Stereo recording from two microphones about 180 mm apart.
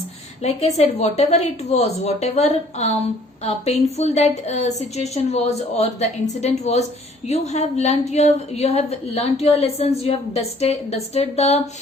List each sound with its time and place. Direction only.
0.4 s a woman's voice: 35° left (ahead or behind)